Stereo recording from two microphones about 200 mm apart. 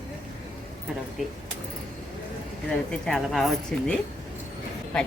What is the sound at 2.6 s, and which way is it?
A woman's voice, 5° left (ahead or behind).